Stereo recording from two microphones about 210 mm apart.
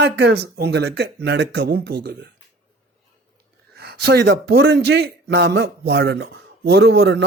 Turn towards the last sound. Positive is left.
turn(degrees=-50)  # may be behind; listen again after turning